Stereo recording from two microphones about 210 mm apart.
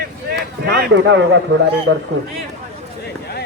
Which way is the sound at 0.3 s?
50° right (ahead or behind).